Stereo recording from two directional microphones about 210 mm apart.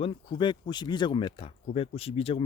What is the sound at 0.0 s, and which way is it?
Speech, 25° left (ahead or behind).